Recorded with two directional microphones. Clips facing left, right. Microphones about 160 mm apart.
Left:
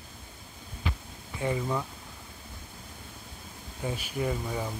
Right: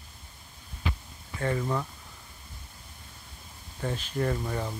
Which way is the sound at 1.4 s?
10° left (ahead or behind).